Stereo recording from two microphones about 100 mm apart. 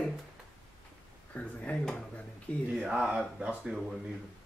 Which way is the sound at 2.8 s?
5° right (ahead or behind).